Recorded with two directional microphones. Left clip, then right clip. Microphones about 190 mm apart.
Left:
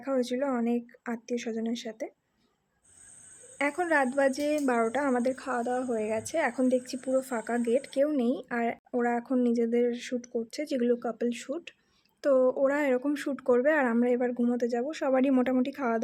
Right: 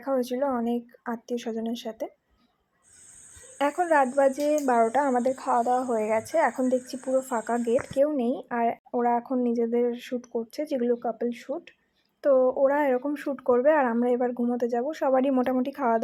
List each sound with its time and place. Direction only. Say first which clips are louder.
0.0 s speech: right 3 dB; 20° left (ahead or behind)
3.8 s speech: right 4 dB; 25° left (ahead or behind)